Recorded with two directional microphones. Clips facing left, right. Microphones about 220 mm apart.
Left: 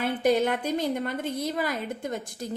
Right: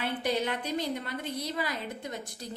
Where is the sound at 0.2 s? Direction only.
45° left (ahead or behind).